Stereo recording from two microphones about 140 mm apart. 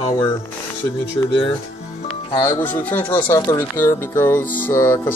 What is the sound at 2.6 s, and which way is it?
Speech, 10° left (ahead or behind).